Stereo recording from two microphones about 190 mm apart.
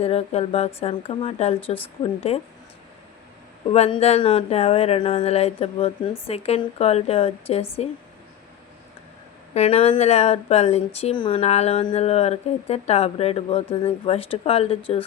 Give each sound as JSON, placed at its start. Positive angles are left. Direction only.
{"t": 0.0, "sound": "speech", "side_deg": 30}
{"t": 3.7, "sound": "speech", "side_deg": 30}
{"t": 9.6, "sound": "speech", "side_deg": 35}